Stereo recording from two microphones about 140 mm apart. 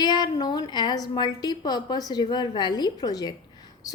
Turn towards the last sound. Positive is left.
turn(degrees=30)  # may be behind; listen again after turning